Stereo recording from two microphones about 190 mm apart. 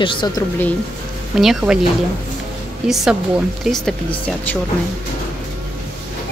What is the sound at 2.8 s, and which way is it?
Speech, 5° right (ahead or behind).